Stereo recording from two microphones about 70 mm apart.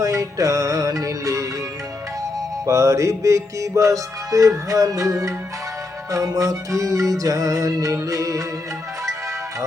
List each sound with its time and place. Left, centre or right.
0.0 s music: right
2.6 s music: right